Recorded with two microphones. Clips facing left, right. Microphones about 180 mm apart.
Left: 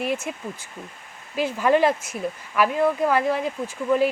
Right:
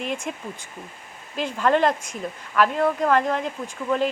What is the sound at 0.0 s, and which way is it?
Speech, 5° left (ahead or behind).